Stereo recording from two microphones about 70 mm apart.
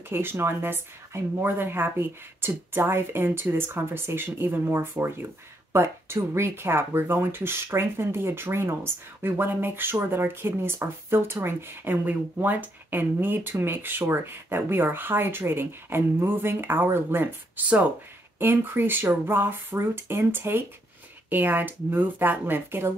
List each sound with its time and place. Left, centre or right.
0.1 s speech: right